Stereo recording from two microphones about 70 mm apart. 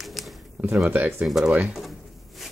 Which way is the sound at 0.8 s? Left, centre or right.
Right.